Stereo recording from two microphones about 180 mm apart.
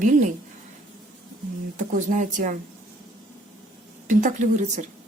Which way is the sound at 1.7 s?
45° right (ahead or behind).